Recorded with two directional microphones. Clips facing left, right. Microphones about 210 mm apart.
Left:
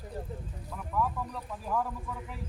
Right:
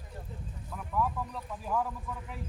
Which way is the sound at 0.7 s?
Centre (ahead or behind).